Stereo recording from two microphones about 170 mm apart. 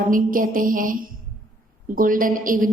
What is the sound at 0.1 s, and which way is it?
A woman's voice, 55° right (ahead or behind).